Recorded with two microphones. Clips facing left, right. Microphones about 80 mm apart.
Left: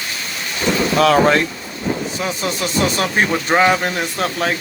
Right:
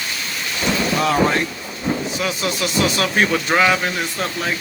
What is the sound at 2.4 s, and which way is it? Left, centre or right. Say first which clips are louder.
Speech: left 1 dB; left.